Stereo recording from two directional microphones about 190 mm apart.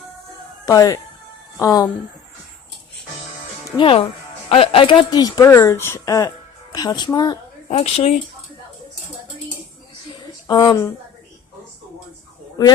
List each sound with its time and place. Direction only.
0.6 s speech: 20° left (ahead or behind)
3.8 s speech: 30° left (ahead or behind)
10.4 s speech: 20° left (ahead or behind)